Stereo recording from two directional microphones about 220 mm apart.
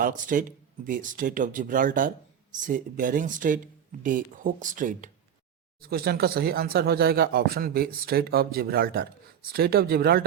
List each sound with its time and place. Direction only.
0.0 s speech: 35° right (ahead or behind)